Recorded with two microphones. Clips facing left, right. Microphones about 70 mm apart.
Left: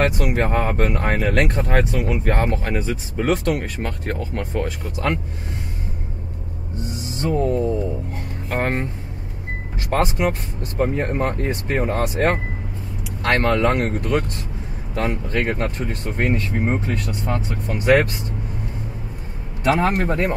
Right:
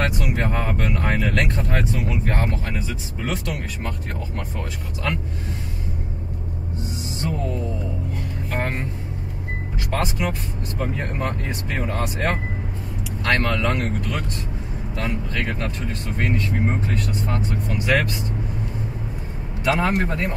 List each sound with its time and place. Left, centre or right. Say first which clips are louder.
0.4 s speech: left 6 dB; left
1.6 s speech: left 4 dB; left
7.2 s speech: left 8 dB; left
9.8 s speech: left 5 dB; left
19.6 s speech: left 2 dB; left